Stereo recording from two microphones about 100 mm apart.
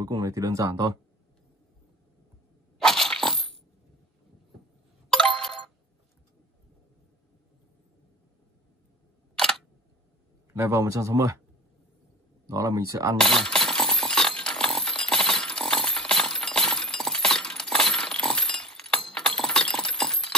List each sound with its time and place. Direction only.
0.0 s speech: 35° right (ahead or behind)
2.8 s dog: 5° left (ahead or behind)
5.1 s a sound: 5° left (ahead or behind)
9.3 s camera: 5° left (ahead or behind)
10.5 s speech: 30° right (ahead or behind)
12.4 s speech: 35° right (ahead or behind)
13.2 s a sound: 5° left (ahead or behind)